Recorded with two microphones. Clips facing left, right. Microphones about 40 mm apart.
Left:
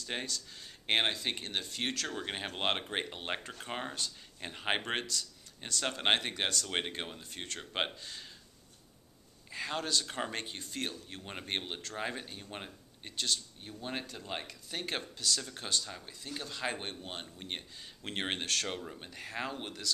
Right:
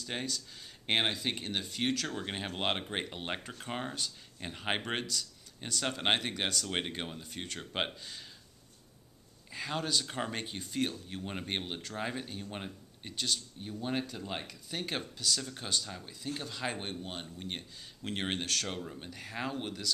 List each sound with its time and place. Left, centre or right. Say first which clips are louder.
0.0 s speech: right 1 dB; centre
9.5 s speech: even; centre